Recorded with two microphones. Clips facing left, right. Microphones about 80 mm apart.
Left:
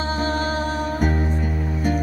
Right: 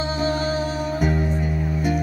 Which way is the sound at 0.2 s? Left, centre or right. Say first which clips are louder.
Right 2 dB; left.